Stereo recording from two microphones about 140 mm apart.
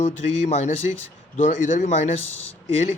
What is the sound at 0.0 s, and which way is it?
Speech, 55° left (ahead or behind).